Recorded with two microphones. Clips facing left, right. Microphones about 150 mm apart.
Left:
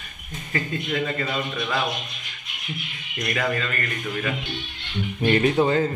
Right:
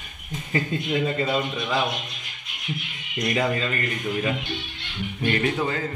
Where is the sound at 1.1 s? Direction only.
20° right (ahead or behind).